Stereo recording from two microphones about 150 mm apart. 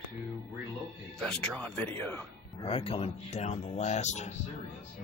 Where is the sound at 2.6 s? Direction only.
40° left (ahead or behind).